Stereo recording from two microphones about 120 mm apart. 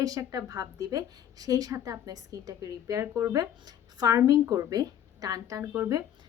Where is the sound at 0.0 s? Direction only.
30° right (ahead or behind).